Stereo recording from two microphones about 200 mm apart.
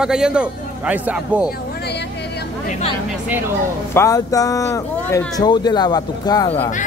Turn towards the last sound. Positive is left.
turn(degrees=30)  # may be behind; listen again after turning